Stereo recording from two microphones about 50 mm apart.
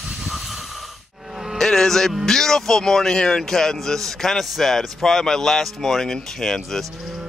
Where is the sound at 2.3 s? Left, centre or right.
Centre.